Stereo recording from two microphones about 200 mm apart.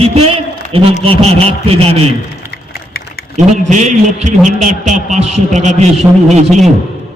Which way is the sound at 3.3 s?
35° right (ahead or behind).